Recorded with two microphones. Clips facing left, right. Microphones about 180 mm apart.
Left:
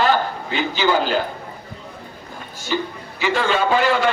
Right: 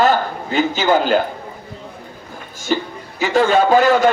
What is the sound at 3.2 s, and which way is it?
Speech, 40° right (ahead or behind).